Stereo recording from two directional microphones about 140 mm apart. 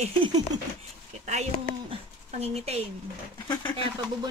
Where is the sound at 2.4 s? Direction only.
45° right (ahead or behind).